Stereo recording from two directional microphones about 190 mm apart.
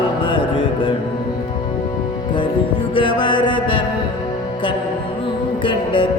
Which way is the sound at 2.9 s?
25° left (ahead or behind).